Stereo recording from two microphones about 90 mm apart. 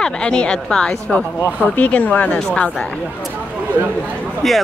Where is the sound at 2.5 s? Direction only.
5° left (ahead or behind).